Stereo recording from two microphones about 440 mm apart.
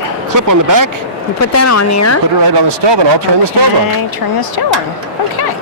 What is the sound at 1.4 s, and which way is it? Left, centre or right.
Speech, left.